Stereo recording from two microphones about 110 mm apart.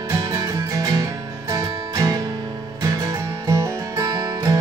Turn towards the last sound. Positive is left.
turn(degrees=-30)  # may be behind; listen again after turning